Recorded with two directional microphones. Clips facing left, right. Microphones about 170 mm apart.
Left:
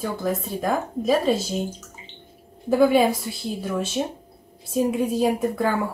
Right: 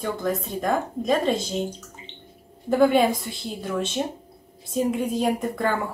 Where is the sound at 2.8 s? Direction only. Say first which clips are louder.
Left 1 dB; 5° left (ahead or behind).